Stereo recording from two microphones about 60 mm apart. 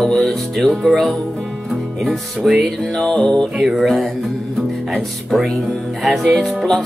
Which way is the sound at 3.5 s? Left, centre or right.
Centre.